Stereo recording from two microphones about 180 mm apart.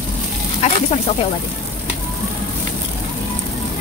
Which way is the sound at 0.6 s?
40° left (ahead or behind).